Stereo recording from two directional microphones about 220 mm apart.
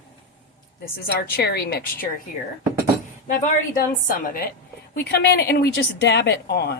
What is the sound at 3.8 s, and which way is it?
A woman's voice, 40° left (ahead or behind).